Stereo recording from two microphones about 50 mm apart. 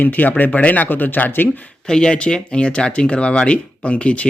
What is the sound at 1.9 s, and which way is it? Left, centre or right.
Speech, centre.